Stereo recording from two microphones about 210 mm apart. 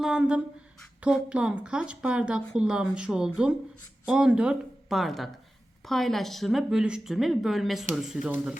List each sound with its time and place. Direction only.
0.0 s a woman's voice: 5° right (ahead or behind)